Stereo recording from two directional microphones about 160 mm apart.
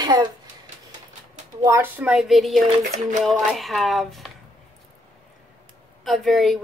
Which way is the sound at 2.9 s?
50° right (ahead or behind).